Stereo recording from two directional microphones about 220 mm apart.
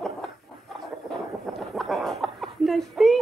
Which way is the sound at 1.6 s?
Centre (ahead or behind).